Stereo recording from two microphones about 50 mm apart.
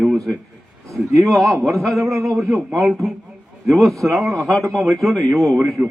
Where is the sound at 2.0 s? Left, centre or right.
Right.